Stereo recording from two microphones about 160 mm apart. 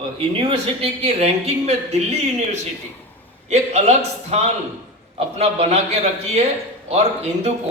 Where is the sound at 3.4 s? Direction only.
45° right (ahead or behind).